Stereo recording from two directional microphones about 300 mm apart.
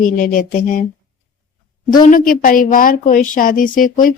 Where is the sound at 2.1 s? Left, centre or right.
Left.